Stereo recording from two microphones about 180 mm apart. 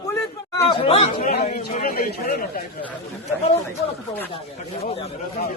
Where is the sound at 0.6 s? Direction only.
35° left (ahead or behind).